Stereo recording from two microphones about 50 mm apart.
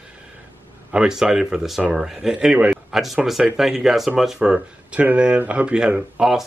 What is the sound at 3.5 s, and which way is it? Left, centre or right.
Speech, centre.